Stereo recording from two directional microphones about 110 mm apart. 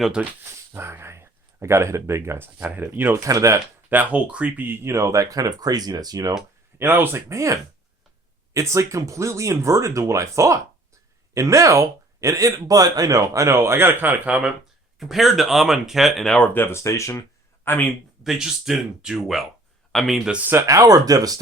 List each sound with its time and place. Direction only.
0.0 s speech: 10° right (ahead or behind)
0.7 s speech: 20° right (ahead or behind)
3.2 s speech: 30° right (ahead or behind)
3.8 s speech: 15° right (ahead or behind); by 6.3 s 35° right (ahead or behind)
6.7 s speech: 20° right (ahead or behind); by 16.5 s 5° left (ahead or behind)
16.6 s speech: 25° left (ahead or behind)
18.2 s speech: 5° right (ahead or behind); by 21.3 s 35° right (ahead or behind)